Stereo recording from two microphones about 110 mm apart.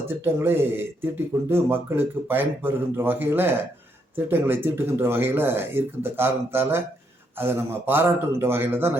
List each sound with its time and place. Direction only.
0.3 s speech: 20° right (ahead or behind)